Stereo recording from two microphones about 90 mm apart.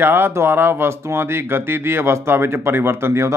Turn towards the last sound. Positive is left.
turn(degrees=-30)  # may be behind; listen again after turning